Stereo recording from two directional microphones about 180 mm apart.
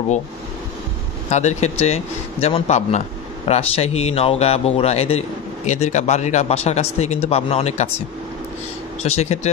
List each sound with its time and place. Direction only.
1.3 s speech: 40° left (ahead or behind)
9.0 s speech: 35° left (ahead or behind)